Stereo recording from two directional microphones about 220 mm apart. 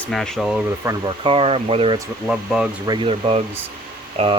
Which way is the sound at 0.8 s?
20° right (ahead or behind).